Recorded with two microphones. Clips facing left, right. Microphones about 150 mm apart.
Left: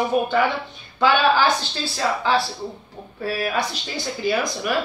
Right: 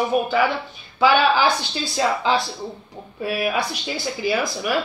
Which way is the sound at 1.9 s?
20° right (ahead or behind).